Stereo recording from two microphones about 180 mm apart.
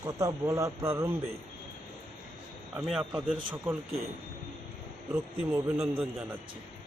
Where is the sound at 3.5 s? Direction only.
10° right (ahead or behind).